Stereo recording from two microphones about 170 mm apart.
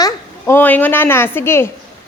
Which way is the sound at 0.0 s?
15° left (ahead or behind).